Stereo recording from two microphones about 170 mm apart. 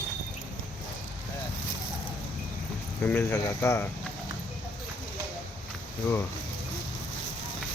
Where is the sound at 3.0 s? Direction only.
10° left (ahead or behind).